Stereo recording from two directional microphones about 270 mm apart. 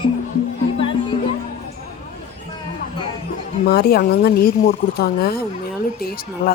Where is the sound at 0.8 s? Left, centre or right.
Centre.